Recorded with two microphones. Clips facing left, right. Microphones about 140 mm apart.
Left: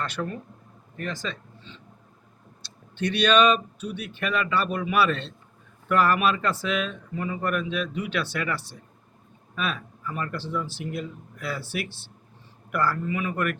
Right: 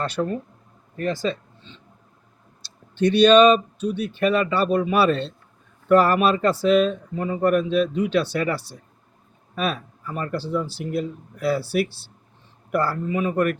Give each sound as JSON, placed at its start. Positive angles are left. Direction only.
{"t": 0.0, "sound": "speech", "side_deg": -30}
{"t": 3.0, "sound": "speech", "side_deg": -30}
{"t": 12.7, "sound": "speech", "side_deg": -30}